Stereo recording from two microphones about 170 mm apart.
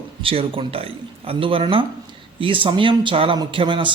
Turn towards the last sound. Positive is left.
turn(degrees=-30)  # may be behind; listen again after turning